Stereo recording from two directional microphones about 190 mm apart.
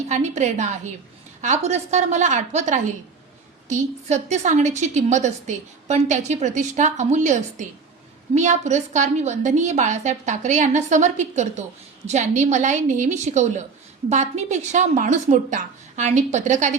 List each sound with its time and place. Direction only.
0.1 s a woman's voice: 40° right (ahead or behind)